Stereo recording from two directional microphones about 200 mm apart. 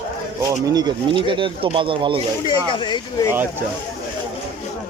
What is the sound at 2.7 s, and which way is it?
Speech, 25° left (ahead or behind).